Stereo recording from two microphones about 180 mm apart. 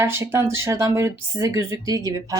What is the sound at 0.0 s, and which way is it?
A woman's voice, 15° right (ahead or behind).